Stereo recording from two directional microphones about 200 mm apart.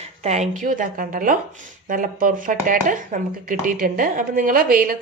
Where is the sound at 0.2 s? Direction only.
35° right (ahead or behind).